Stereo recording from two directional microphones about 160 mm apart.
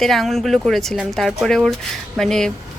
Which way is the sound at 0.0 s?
Centre (ahead or behind).